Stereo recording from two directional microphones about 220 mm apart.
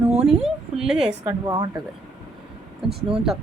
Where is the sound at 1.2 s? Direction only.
20° right (ahead or behind).